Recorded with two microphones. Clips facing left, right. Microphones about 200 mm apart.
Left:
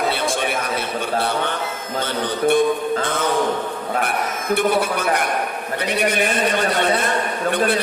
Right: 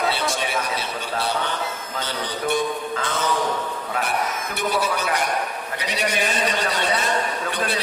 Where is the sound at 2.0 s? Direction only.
55° left (ahead or behind).